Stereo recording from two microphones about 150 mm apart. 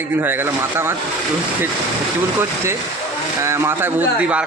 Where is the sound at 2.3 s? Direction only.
15° right (ahead or behind).